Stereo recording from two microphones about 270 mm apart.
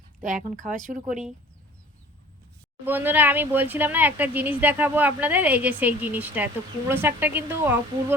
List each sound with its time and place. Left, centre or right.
0.2 s speech: right
2.8 s speech: centre